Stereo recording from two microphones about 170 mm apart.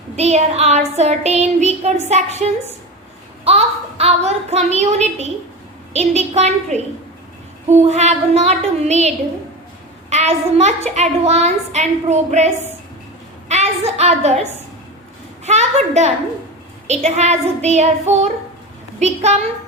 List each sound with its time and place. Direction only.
0.2 s a child's voice: 40° right (ahead or behind)
3.4 s a child's voice: 40° right (ahead or behind)
13.5 s a woman's voice: 40° right (ahead or behind)
15.4 s a child's voice: 40° right (ahead or behind)